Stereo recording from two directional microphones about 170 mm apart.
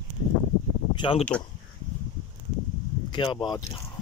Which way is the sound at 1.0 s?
35° left (ahead or behind).